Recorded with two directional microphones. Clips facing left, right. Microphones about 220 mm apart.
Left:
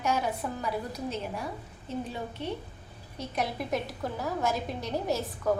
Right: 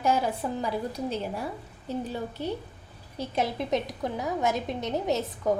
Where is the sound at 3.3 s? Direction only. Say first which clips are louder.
Right 4 dB; 25° right (ahead or behind).